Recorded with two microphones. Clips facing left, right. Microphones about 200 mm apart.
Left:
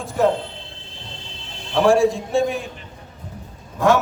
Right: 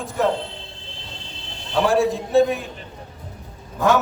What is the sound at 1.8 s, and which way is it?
Speech, 5° right (ahead or behind).